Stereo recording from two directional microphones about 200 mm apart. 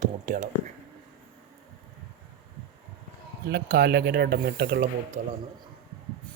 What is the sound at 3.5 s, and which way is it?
Speech, 55° right (ahead or behind).